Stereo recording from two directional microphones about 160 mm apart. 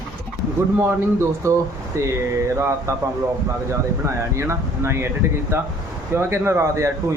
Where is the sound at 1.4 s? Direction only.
20° right (ahead or behind).